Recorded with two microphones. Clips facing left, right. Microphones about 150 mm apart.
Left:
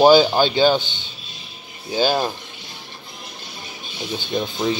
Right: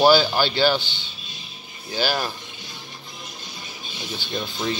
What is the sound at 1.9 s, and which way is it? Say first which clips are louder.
Speech: left 5 dB; 20° left (ahead or behind).